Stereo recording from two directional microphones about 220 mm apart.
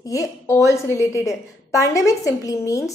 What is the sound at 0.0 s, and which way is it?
A woman's voice, 15° left (ahead or behind).